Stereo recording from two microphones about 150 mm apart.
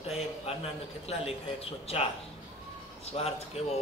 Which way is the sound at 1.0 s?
40° left (ahead or behind).